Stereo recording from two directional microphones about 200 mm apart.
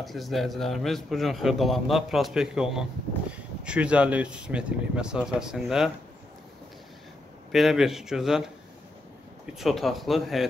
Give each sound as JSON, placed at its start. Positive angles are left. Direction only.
{"t": 0.0, "sound": "a man's voice", "side_deg": 0}
{"t": 7.5, "sound": "a man's voice", "side_deg": 0}
{"t": 9.6, "sound": "a man's voice", "side_deg": 0}